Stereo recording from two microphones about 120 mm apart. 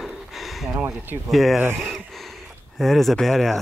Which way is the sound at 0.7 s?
15° right (ahead or behind).